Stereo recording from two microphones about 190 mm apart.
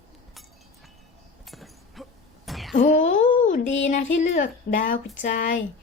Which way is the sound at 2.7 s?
40° left (ahead or behind).